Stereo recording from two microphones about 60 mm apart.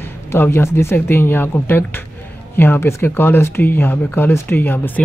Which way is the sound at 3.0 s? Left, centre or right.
Left.